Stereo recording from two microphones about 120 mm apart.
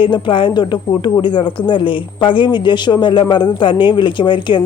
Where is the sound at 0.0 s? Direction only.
45° left (ahead or behind).